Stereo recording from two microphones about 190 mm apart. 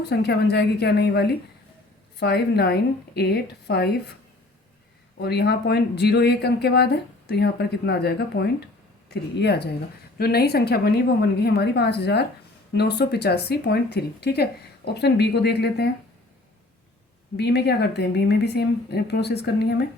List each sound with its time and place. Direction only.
0.0 s speech: 60° left (ahead or behind)
5.2 s speech: 60° left (ahead or behind)
17.3 s speech: 60° left (ahead or behind)